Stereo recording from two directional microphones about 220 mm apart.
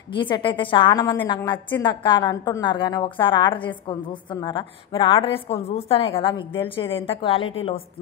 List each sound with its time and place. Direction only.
0.1 s a woman's voice: 20° left (ahead or behind)